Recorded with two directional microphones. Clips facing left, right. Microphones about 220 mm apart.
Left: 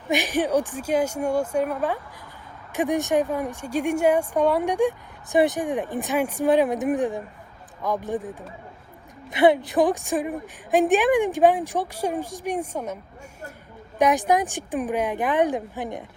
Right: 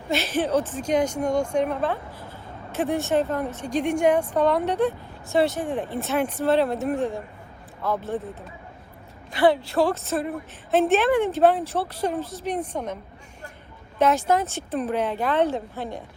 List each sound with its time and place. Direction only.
0.1 s a woman's voice: 15° left (ahead or behind)
9.3 s a woman's voice: 20° left (ahead or behind)
14.0 s a woman's voice: 15° left (ahead or behind)